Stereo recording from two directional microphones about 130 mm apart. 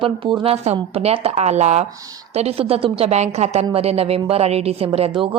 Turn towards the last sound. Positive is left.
turn(degrees=-40)  # may be behind; listen again after turning